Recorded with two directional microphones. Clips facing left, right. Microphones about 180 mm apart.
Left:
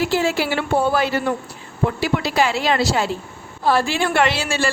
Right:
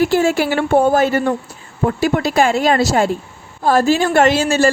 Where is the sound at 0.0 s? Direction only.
50° right (ahead or behind).